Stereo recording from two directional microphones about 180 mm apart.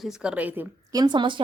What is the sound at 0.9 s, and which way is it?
Speech, 25° right (ahead or behind).